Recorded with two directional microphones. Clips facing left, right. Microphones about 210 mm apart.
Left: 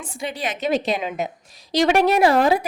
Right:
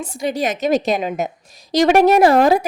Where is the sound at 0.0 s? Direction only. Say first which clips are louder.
Right 7 dB; 40° right (ahead or behind).